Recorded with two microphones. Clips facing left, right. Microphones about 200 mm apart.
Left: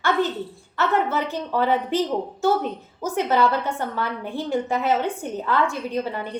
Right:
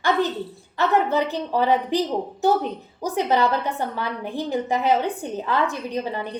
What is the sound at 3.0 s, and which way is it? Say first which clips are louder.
A woman's voice: even; 15° right (ahead or behind).